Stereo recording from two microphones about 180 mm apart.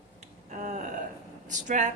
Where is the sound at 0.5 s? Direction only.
40° right (ahead or behind).